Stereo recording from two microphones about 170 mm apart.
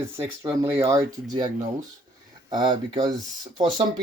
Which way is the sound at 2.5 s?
25° right (ahead or behind).